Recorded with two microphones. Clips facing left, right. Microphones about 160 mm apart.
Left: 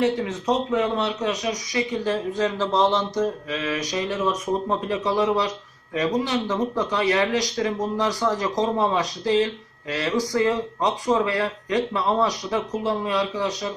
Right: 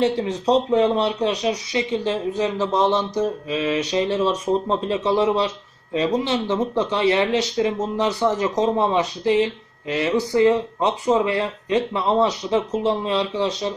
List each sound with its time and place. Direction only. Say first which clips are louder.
0.0 s speech: right 2 dB; 30° right (ahead or behind)